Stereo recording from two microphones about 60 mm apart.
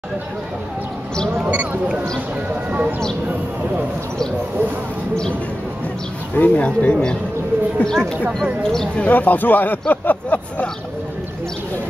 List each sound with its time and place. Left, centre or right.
1.3 s a sound: right
2.5 s speech: right
6.3 s speech: left; by 8.2 s centre
8.7 s speech: left